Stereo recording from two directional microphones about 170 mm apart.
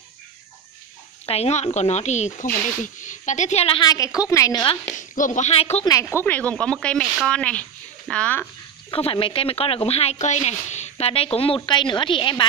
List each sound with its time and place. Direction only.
1.2 s a woman's voice: 35° left (ahead or behind); by 4.7 s 20° left (ahead or behind)
4.9 s speech: 50° left (ahead or behind)
5.9 s speech: 15° left (ahead or behind)
8.9 s speech: 30° left (ahead or behind)